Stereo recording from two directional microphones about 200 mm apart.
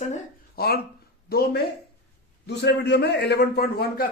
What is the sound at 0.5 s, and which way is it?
A man's voice, 50° left (ahead or behind).